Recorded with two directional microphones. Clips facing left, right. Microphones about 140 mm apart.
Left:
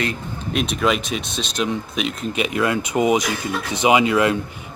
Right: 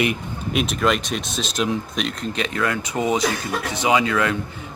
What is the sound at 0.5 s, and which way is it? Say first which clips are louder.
Speech: even; centre (ahead or behind).